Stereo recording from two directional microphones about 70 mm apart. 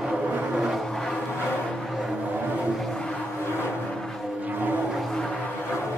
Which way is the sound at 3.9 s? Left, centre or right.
Centre.